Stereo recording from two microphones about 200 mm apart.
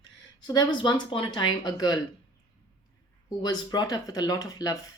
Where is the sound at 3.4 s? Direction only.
20° left (ahead or behind).